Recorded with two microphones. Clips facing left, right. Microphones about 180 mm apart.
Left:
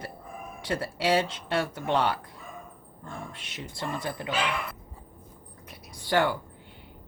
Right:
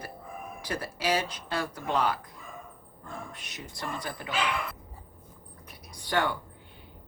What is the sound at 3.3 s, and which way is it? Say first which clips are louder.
Speech: left 3 dB; 25° left (ahead or behind).